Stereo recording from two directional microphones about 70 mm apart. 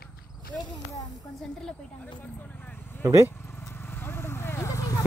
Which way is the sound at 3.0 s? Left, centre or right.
Right.